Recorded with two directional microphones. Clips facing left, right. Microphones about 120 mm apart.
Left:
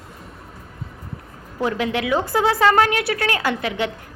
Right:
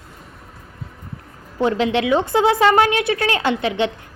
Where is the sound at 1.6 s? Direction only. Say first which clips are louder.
Right 4 dB; 25° right (ahead or behind).